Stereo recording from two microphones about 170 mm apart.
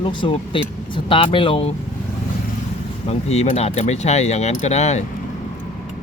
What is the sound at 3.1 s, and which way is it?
Speech, 40° left (ahead or behind).